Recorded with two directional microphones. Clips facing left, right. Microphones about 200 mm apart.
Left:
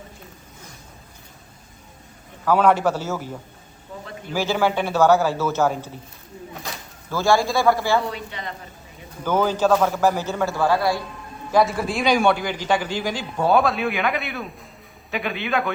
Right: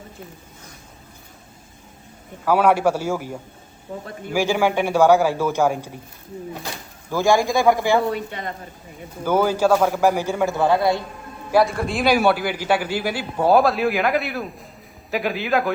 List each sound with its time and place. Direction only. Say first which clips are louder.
2.4 s a man's voice: right 1 dB; 10° right (ahead or behind)
7.1 s a man's voice: right 2 dB; 15° right (ahead or behind)
8.1 s a woman's voice: right 5 dB; 50° right (ahead or behind)
9.2 s a man's voice: right 2 dB; 10° right (ahead or behind)
11.5 s a man's voice: right 1 dB; centre (ahead or behind)